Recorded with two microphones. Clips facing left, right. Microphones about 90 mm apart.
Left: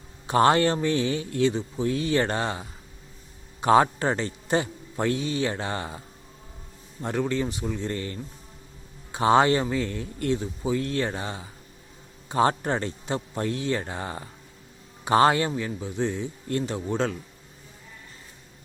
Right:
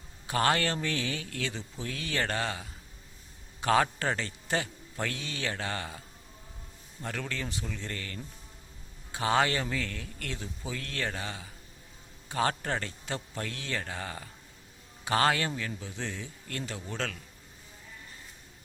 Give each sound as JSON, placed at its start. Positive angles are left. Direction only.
{"t": 0.3, "sound": "speech", "side_deg": 25}
{"t": 7.0, "sound": "speech", "side_deg": 25}